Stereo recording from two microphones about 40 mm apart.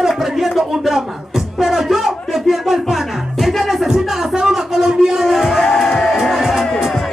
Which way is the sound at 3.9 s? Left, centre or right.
Centre.